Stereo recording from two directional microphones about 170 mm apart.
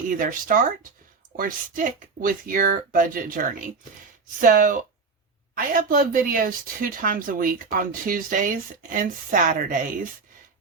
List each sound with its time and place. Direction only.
0.1 s speech: 50° right (ahead or behind)